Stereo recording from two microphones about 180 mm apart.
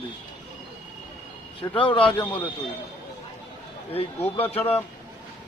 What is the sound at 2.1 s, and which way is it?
Speech, 10° left (ahead or behind).